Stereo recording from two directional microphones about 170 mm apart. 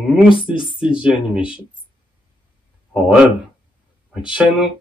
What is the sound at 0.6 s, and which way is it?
Speech, 30° left (ahead or behind).